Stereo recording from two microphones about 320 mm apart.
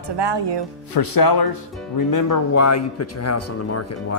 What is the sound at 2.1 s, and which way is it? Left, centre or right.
Speech, left.